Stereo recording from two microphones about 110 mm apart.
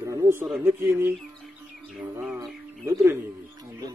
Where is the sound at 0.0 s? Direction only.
25° right (ahead or behind).